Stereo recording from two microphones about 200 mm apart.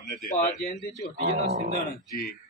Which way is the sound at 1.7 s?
50° left (ahead or behind).